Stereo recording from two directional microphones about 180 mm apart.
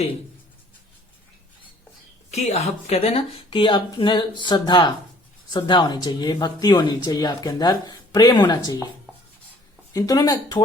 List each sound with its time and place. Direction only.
2.3 s speech: 35° left (ahead or behind)
9.9 s speech: 20° left (ahead or behind)